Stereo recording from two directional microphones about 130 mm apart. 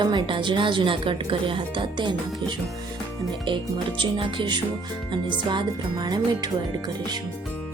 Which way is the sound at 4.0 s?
40° right (ahead or behind).